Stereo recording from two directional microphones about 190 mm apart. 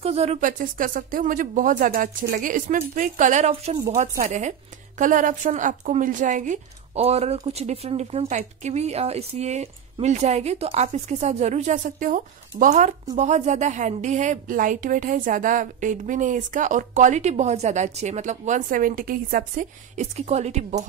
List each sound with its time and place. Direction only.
0.0 s speech: 35° right (ahead or behind)